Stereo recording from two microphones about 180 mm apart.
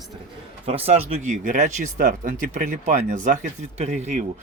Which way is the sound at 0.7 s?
35° right (ahead or behind).